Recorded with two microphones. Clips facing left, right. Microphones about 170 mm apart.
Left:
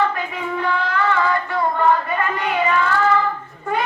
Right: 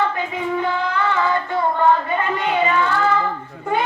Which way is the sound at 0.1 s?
20° right (ahead or behind).